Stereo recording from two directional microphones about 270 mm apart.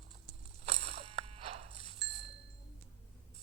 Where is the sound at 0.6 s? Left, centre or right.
Right.